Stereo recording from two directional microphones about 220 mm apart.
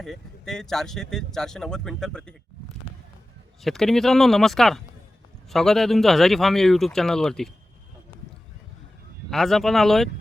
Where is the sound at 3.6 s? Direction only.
Centre (ahead or behind).